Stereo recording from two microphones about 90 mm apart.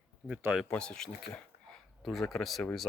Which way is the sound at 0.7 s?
10° left (ahead or behind).